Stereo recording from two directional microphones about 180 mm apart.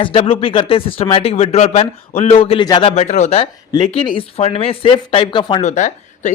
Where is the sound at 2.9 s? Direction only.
40° left (ahead or behind).